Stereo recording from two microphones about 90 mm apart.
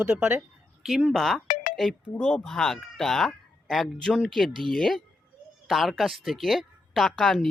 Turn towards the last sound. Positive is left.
turn(degrees=0)  # may be behind; listen again after turning